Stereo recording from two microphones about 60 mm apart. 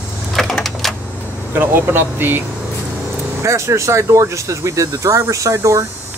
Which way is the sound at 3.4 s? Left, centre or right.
Right.